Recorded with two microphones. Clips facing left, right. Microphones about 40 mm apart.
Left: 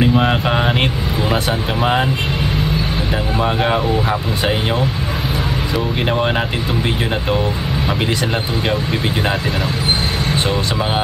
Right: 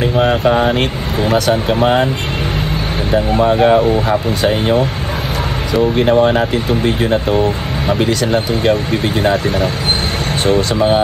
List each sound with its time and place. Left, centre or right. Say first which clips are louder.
0.5 s speech: right 4 dB; centre
3.5 s speech: right 6 dB; centre
6.1 s speech: right 6 dB; centre